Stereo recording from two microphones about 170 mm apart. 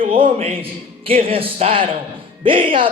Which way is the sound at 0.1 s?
35° right (ahead or behind).